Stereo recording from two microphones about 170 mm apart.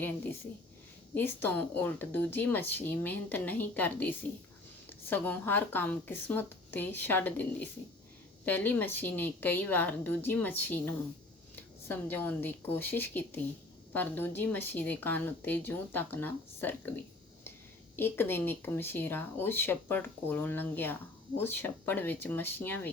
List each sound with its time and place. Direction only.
1.1 s speech: 10° left (ahead or behind)